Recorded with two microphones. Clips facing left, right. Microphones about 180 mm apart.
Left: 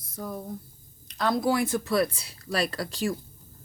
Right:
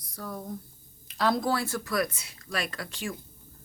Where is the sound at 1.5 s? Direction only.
15° left (ahead or behind).